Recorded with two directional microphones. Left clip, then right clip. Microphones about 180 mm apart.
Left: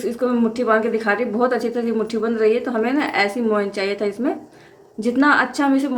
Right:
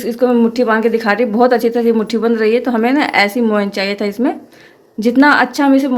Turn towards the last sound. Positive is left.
turn(degrees=-40)  # may be behind; listen again after turning